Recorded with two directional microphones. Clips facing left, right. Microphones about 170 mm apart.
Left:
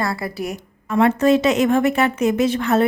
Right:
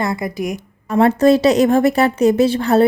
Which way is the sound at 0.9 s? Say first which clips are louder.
Right 3 dB; 35° right (ahead or behind).